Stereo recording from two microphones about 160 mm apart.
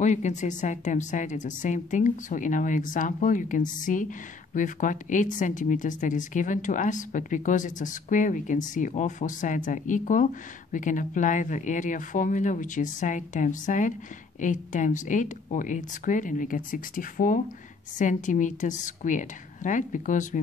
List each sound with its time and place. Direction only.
0.0 s speech: 50° left (ahead or behind)